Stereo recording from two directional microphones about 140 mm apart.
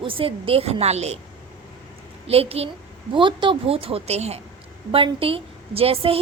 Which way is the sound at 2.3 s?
45° right (ahead or behind).